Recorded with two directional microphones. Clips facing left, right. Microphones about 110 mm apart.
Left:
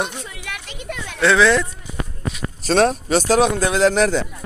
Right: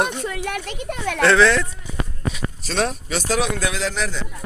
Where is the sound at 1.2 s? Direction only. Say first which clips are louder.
Left 1 dB; 5° left (ahead or behind).